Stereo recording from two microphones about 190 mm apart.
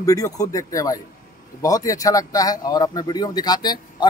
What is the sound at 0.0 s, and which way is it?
Speech, 20° left (ahead or behind).